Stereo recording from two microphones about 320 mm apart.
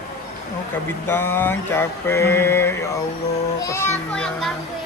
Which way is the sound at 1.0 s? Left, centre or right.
Centre.